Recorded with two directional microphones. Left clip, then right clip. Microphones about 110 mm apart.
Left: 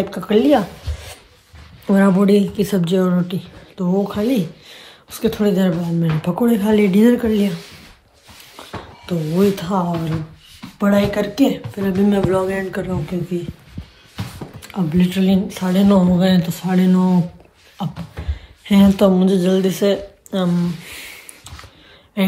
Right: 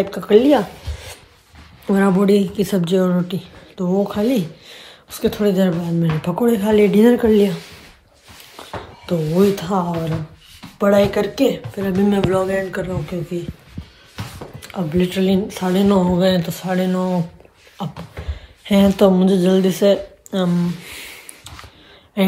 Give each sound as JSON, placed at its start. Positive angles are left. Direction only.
{"t": 0.0, "sound": "speech", "side_deg": -15}
{"t": 7.2, "sound": "speech", "side_deg": -35}
{"t": 9.1, "sound": "speech", "side_deg": -30}
{"t": 9.6, "sound": "speech", "side_deg": -15}
{"t": 14.6, "sound": "a sound", "side_deg": -15}
{"t": 15.0, "sound": "speech", "side_deg": -30}
{"t": 15.6, "sound": "speech", "side_deg": -15}
{"t": 16.2, "sound": "speech", "side_deg": -30}
{"t": 16.6, "sound": "speech", "side_deg": -15}
{"t": 18.8, "sound": "speech", "side_deg": -20}
{"t": 20.2, "sound": "speech", "side_deg": -15}